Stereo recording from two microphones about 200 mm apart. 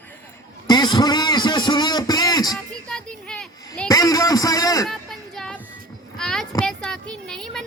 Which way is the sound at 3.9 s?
15° left (ahead or behind).